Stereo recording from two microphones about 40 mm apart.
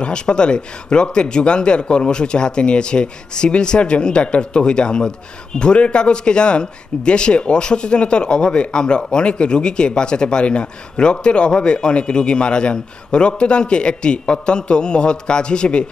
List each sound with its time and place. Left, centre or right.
0.0 s speech: left